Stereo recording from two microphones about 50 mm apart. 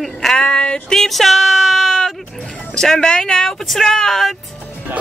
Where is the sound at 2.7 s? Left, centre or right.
Centre.